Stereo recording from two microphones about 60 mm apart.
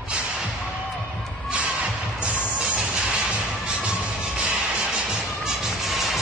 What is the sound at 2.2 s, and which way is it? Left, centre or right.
Music, centre.